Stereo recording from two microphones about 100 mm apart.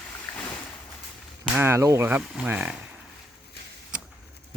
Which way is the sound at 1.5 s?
25° right (ahead or behind).